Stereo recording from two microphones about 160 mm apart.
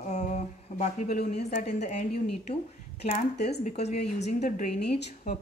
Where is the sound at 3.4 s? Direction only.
45° left (ahead or behind).